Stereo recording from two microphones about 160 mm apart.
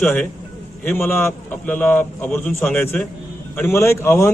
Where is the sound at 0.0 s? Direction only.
5° left (ahead or behind).